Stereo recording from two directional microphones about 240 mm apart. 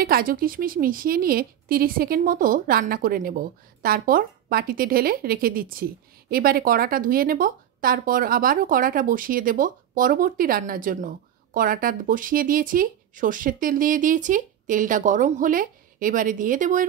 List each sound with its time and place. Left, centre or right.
0.0 s a woman's voice: right